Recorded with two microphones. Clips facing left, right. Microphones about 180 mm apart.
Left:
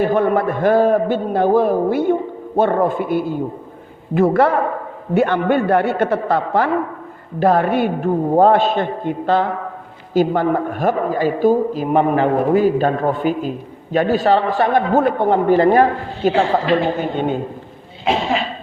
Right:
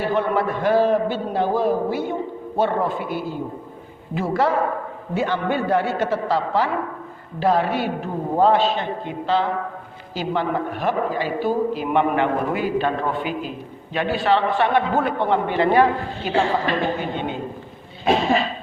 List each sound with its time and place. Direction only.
0.0 s a man's voice: 50° left (ahead or behind)